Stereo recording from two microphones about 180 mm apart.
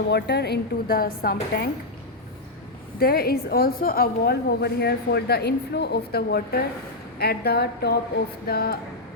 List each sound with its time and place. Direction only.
0.1 s a woman's voice: 70° left (ahead or behind)
3.0 s a woman's voice: 60° left (ahead or behind)